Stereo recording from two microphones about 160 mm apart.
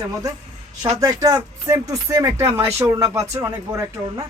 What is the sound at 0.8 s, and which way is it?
Speech, 25° right (ahead or behind).